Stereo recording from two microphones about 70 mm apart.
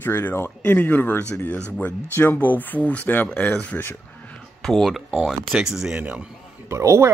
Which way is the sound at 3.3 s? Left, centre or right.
Centre.